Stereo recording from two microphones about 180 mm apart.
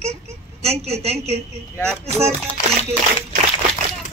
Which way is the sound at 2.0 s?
35° right (ahead or behind).